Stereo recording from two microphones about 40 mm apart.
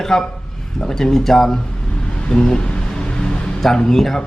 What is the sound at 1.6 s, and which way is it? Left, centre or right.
Vehicle, left.